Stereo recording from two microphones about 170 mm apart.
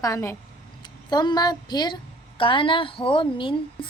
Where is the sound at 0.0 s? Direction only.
20° left (ahead or behind).